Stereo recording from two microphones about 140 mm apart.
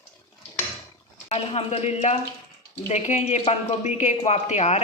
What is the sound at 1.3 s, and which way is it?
Speech, 45° left (ahead or behind).